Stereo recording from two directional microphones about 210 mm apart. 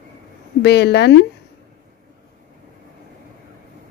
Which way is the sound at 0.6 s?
50° left (ahead or behind).